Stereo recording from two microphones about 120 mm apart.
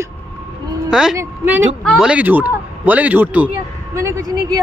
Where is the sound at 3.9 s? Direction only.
25° right (ahead or behind).